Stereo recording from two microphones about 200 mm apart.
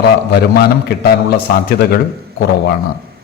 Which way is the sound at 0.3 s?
55° left (ahead or behind).